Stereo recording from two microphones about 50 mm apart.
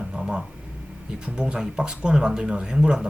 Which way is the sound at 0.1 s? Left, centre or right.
Centre.